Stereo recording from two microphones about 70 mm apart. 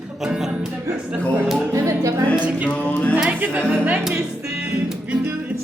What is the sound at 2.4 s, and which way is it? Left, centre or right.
Music, centre.